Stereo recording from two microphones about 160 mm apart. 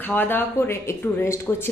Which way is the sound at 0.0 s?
10° left (ahead or behind).